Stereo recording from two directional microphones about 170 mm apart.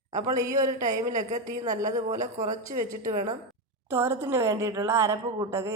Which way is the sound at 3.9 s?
15° right (ahead or behind).